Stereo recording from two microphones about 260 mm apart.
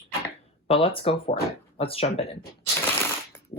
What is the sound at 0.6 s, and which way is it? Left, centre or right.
Speech, left.